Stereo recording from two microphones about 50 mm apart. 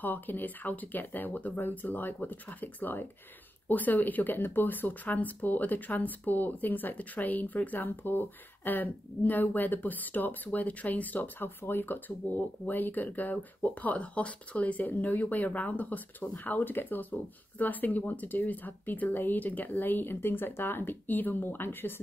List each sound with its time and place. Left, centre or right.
0.0 s speech: left